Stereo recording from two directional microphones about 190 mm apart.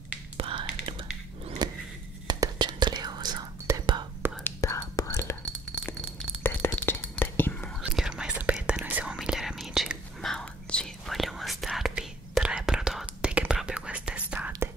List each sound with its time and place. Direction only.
0.4 s whispering: 25° right (ahead or behind)
1.6 s a sound: 20° right (ahead or behind)
2.2 s whispering: 20° right (ahead or behind)
4.4 s whispering: 10° left (ahead or behind); by 14.5 s 5° right (ahead or behind)